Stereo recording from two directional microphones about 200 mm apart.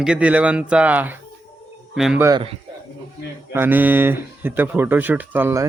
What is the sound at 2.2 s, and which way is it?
Speech, 20° right (ahead or behind).